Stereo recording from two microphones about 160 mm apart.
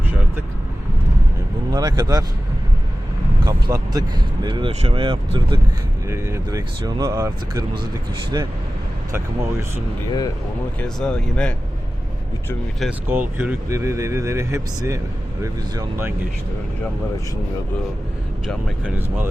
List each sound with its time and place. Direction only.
1.7 s speech: 25° right (ahead or behind)
3.4 s speech: 25° right (ahead or behind)
6.1 s speech: 20° right (ahead or behind)
9.1 s speech: 15° right (ahead or behind)
10.1 s speech: 25° left (ahead or behind)
10.8 s speech: 5° left (ahead or behind)
13.1 s speech: 10° right (ahead or behind)
18.4 s speech: 10° right (ahead or behind)